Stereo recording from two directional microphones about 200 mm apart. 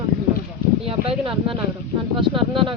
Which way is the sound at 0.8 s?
30° right (ahead or behind).